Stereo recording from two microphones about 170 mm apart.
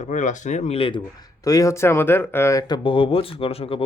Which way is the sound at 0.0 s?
45° left (ahead or behind).